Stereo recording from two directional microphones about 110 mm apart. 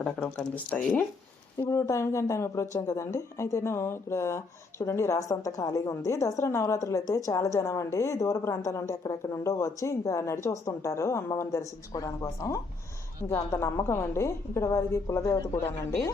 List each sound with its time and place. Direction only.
0.3 s speech: 15° left (ahead or behind)
1.7 s a woman's voice: 25° left (ahead or behind)